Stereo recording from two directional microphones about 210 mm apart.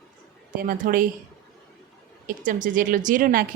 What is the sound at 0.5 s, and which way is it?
Speech, 40° right (ahead or behind).